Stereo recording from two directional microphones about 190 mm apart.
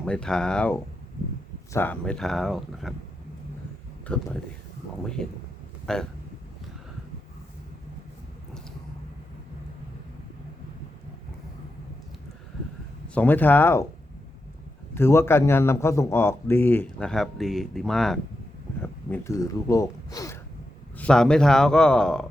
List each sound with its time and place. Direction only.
0.0 s speech: 5° left (ahead or behind)
4.1 s speech: 5° left (ahead or behind)
5.8 s speech: 5° left (ahead or behind)
13.1 s a man's voice: 10° left (ahead or behind)
14.9 s a man's voice: 10° left (ahead or behind)
18.8 s speech: 10° left (ahead or behind)
21.0 s speech: 5° left (ahead or behind)